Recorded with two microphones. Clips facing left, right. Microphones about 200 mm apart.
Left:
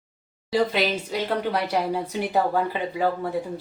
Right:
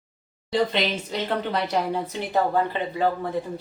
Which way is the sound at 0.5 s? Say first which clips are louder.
Left 1 dB; 5° left (ahead or behind).